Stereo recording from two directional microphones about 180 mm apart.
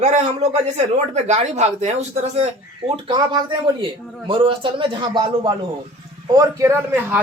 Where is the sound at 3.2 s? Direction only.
25° right (ahead or behind).